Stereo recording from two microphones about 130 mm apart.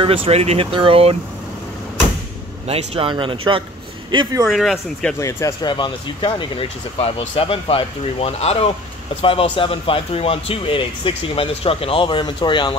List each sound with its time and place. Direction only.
0.0 s speech: 45° right (ahead or behind)
2.6 s speech: 55° right (ahead or behind); by 4.4 s 35° right (ahead or behind)
4.5 s speech: centre (ahead or behind)
5.2 s speech: 25° left (ahead or behind)
5.7 s a man's voice: 35° left (ahead or behind)